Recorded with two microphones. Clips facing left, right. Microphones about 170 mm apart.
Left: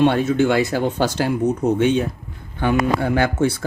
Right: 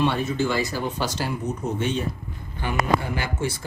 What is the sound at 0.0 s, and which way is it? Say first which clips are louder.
Speech: left 7 dB; 60° left (ahead or behind).